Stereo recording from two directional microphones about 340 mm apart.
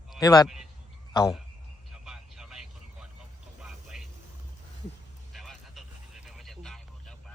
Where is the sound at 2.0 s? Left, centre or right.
Centre.